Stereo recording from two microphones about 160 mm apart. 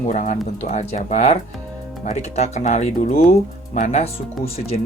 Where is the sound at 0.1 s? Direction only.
45° left (ahead or behind).